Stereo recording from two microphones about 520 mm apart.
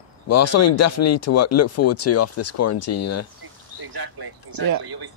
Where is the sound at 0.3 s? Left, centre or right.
Left.